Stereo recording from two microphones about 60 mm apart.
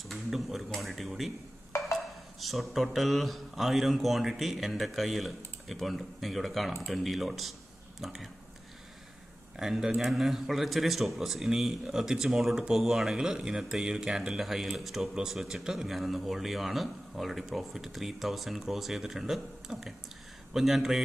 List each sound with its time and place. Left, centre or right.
0.1 s a man's voice: centre
1.7 s a sound: left
2.4 s speech: centre
9.6 s speech: centre